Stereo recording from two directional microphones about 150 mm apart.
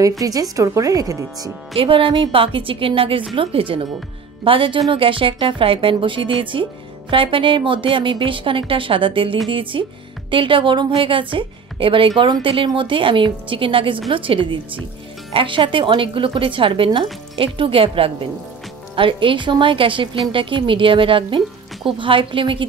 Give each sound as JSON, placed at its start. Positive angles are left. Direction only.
{"t": 0.2, "sound": "a woman's voice", "side_deg": -25}
{"t": 1.8, "sound": "a woman's voice", "side_deg": -35}